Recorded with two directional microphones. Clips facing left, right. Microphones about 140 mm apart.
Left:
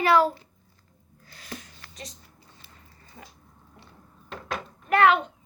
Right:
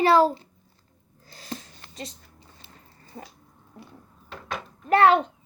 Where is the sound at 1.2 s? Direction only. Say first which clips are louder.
Right 4 dB; 30° right (ahead or behind).